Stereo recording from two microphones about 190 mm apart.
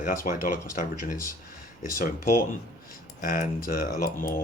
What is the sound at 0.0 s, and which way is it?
Speech, 45° left (ahead or behind).